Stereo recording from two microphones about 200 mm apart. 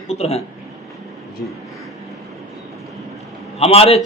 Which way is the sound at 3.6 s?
30° left (ahead or behind).